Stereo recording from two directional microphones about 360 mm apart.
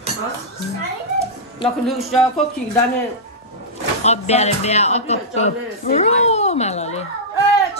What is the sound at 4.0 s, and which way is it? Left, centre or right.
Speech, centre.